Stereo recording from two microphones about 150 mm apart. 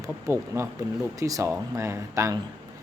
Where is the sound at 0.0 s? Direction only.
20° right (ahead or behind).